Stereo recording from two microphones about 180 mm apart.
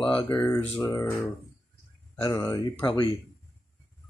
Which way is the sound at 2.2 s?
20° left (ahead or behind).